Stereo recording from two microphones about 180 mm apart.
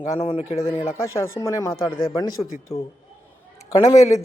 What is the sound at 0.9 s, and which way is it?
Speech, 15° left (ahead or behind).